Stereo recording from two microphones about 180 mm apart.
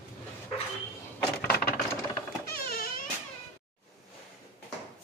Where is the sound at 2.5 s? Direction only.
55° left (ahead or behind).